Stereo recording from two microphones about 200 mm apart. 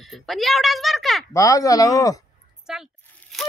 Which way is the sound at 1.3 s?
15° left (ahead or behind).